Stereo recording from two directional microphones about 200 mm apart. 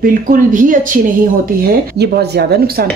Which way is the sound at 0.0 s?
45° right (ahead or behind).